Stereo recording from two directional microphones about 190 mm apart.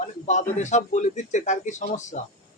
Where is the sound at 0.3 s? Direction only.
40° left (ahead or behind).